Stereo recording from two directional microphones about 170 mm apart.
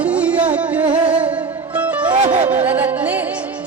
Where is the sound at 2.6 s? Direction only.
10° right (ahead or behind).